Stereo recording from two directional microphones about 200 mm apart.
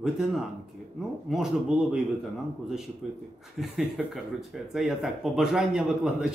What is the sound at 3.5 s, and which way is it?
Speech, centre (ahead or behind).